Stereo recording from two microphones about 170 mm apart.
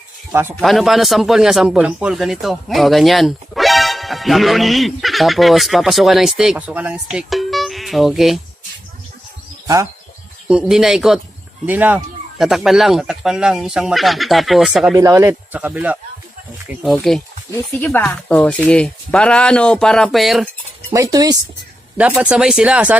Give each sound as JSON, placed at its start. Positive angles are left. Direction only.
{"t": 0.3, "sound": "a man's voice", "side_deg": -15}
{"t": 0.6, "sound": "a man's voice", "side_deg": 0}
{"t": 10.5, "sound": "a man's voice", "side_deg": -5}
{"t": 14.9, "sound": "speech", "side_deg": -20}
{"t": 16.8, "sound": "a man's voice", "side_deg": 0}
{"t": 20.9, "sound": "speech", "side_deg": -20}
{"t": 21.9, "sound": "speech", "side_deg": -10}